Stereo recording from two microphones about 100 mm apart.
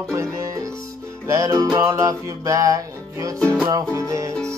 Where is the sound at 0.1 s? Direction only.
30° right (ahead or behind).